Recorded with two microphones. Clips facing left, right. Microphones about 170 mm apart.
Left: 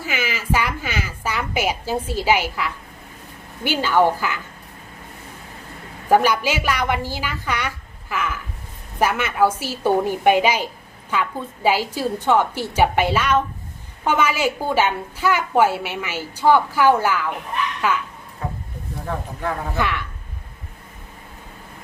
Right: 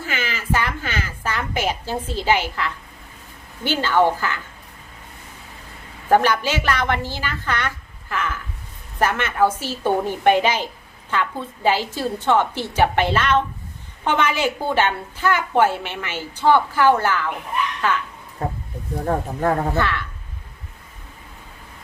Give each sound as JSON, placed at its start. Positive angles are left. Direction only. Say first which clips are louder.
{"t": 0.0, "sound": "a sound", "louder": "left 2 dB", "side_deg": 10}
{"t": 3.6, "sound": "a woman's voice", "louder": "even", "side_deg": 10}
{"t": 6.1, "sound": "a woman's voice", "louder": "even", "side_deg": 10}
{"t": 18.4, "sound": "speech", "louder": "right 3 dB", "side_deg": -40}
{"t": 19.7, "sound": "a woman's voice", "louder": "right 1 dB", "side_deg": 15}